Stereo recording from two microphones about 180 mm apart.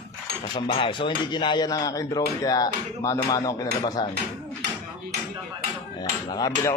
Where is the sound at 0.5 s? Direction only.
30° left (ahead or behind).